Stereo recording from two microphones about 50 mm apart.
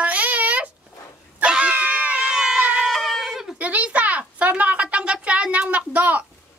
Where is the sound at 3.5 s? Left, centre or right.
Right.